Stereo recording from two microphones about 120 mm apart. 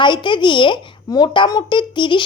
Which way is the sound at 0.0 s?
40° left (ahead or behind).